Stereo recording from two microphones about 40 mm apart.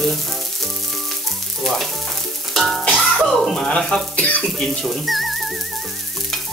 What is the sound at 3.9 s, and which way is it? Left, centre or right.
Speech, left.